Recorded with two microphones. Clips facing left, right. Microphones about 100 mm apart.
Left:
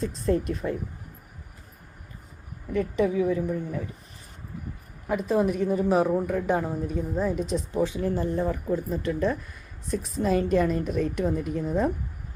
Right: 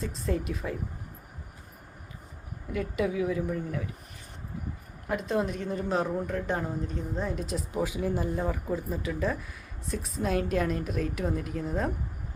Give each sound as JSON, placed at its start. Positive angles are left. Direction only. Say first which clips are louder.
{"t": 0.0, "sound": "speech", "louder": "left 6 dB", "side_deg": 0}
{"t": 2.7, "sound": "speech", "louder": "left 5 dB", "side_deg": -5}
{"t": 5.0, "sound": "a woman's voice", "louder": "left 5 dB", "side_deg": 5}